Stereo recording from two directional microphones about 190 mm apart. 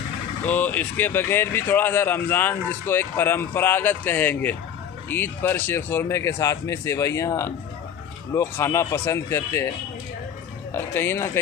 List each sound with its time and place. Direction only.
0.4 s speech: 10° left (ahead or behind)
10.8 s speech: 10° left (ahead or behind)